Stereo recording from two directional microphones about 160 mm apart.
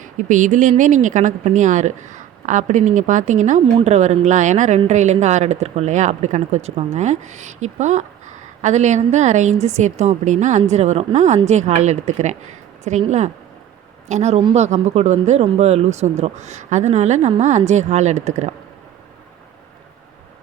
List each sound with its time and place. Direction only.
0.0 s speech: 50° right (ahead or behind)